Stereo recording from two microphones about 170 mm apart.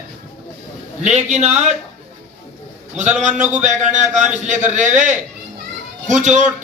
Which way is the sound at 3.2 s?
45° right (ahead or behind).